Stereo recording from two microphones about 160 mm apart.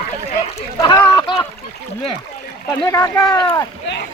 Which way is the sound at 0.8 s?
25° left (ahead or behind).